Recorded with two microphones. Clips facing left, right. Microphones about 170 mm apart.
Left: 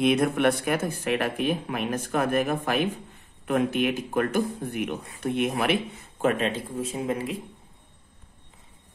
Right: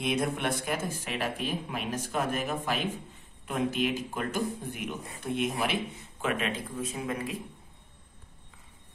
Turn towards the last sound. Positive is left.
turn(degrees=30)  # may be behind; listen again after turning